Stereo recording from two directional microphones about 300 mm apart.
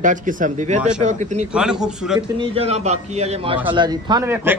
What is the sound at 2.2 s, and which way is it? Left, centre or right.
A man's voice, centre.